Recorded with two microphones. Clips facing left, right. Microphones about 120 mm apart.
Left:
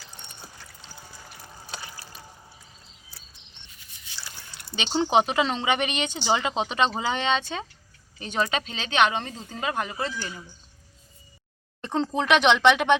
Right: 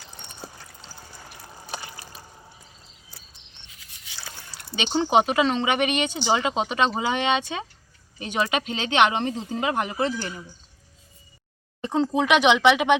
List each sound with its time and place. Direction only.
4.7 s speech: 5° right (ahead or behind)
11.8 s speech: 10° right (ahead or behind)